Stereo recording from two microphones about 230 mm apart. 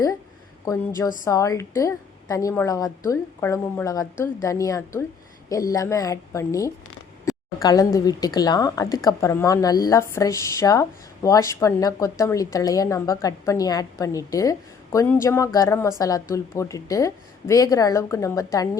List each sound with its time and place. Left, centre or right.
0.6 s speech: centre
7.3 s a sound: centre
7.9 s speech: centre